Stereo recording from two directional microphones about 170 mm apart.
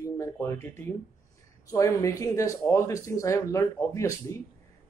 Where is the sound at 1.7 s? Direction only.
20° left (ahead or behind).